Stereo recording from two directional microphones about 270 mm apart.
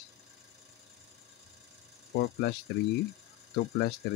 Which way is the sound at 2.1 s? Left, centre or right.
Left.